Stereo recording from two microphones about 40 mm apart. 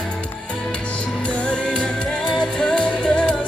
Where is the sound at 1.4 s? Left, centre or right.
Left.